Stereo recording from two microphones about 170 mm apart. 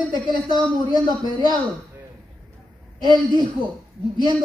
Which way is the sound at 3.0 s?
25° right (ahead or behind).